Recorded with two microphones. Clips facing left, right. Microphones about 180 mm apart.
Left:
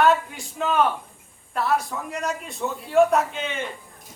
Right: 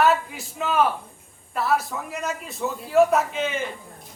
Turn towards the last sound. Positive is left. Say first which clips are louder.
# right 1 dB
turn(degrees=0)  # may be behind; listen again after turning